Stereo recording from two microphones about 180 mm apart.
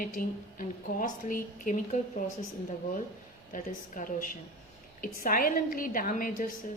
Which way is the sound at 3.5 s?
50° left (ahead or behind).